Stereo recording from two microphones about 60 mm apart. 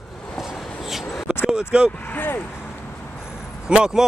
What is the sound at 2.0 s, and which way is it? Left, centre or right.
Speech, left.